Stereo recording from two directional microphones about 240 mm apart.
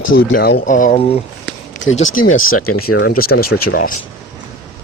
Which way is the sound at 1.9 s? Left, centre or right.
Left.